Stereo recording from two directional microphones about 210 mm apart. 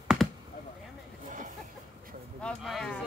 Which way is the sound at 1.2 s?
35° right (ahead or behind).